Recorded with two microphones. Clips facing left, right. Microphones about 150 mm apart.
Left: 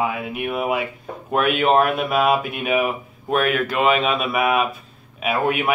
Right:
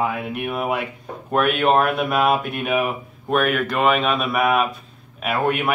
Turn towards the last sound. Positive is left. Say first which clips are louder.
# even
turn(degrees=0)  # may be behind; listen again after turning